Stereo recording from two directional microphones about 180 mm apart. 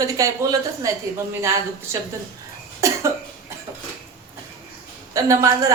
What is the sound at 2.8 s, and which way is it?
Cough, 15° right (ahead or behind).